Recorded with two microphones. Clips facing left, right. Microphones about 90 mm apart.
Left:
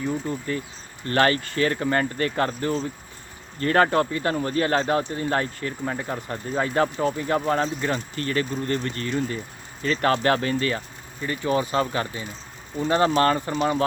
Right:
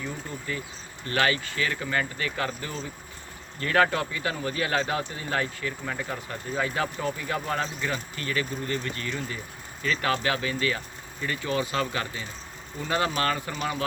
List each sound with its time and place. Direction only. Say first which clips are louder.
0.5 s speech: left 5 dB; 40° left (ahead or behind)
11.2 s speech: left 4 dB; 30° left (ahead or behind)